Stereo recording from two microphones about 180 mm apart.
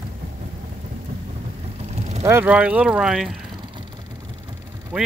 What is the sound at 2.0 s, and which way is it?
Vehicle, 40° right (ahead or behind).